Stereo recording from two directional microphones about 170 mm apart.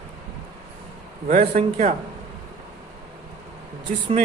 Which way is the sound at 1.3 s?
50° right (ahead or behind).